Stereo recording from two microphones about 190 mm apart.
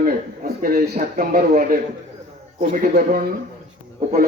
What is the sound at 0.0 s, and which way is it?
A man's voice, 50° right (ahead or behind).